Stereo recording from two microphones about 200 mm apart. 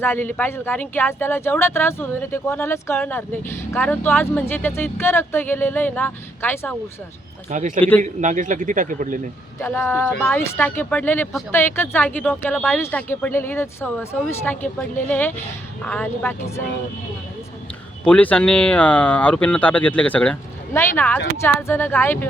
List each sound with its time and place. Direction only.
0.0 s speech: 10° left (ahead or behind)
7.8 s speech: 10° left (ahead or behind)
8.0 s speech: 40° right (ahead or behind)
9.6 s speech: 15° left (ahead or behind)
18.0 s speech: 5° left (ahead or behind)